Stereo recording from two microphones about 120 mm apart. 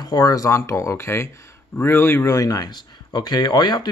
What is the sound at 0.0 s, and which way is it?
Speech, 30° left (ahead or behind).